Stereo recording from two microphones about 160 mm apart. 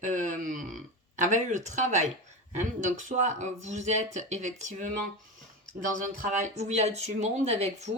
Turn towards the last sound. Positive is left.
turn(degrees=-40)  # may be behind; listen again after turning